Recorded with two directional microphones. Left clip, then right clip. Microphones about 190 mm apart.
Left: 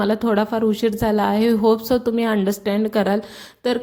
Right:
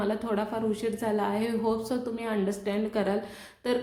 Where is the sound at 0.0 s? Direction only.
45° left (ahead or behind).